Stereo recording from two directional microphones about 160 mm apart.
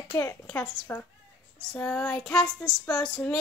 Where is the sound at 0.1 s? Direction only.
20° left (ahead or behind).